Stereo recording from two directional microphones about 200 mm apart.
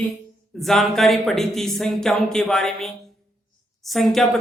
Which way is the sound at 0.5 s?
Centre (ahead or behind).